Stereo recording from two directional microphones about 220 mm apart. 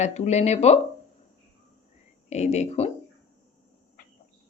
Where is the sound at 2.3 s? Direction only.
30° left (ahead or behind).